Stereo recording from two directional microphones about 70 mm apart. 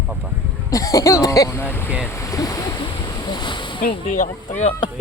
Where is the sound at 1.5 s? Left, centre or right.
Left.